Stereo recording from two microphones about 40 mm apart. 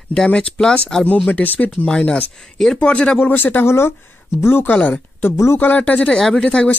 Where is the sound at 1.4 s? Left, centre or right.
Left.